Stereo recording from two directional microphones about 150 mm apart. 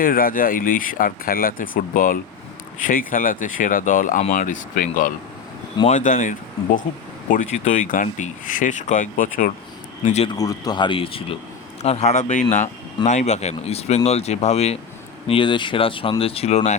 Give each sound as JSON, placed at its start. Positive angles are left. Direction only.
{"t": 0.0, "sound": "speech", "side_deg": 70}
{"t": 10.0, "sound": "speech", "side_deg": 50}
{"t": 10.3, "sound": "speech", "side_deg": 25}
{"t": 15.3, "sound": "speech", "side_deg": 35}